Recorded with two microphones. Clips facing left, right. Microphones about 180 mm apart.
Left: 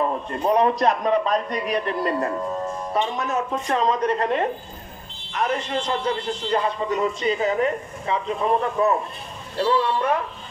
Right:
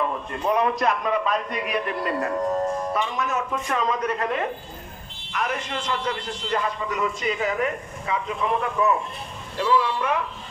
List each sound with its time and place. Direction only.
0.0 s a man's voice: 35° left (ahead or behind)